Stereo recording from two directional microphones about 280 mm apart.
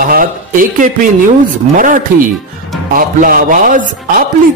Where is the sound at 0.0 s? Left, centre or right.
Right.